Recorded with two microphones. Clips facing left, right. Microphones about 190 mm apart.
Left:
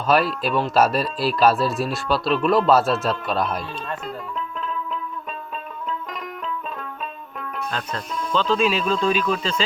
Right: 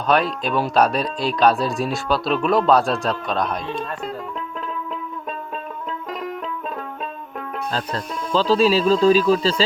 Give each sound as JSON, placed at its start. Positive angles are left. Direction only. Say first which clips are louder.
{"t": 0.1, "sound": "speech", "louder": "even", "side_deg": 5}
{"t": 7.7, "sound": "speech", "louder": "right 4 dB", "side_deg": -35}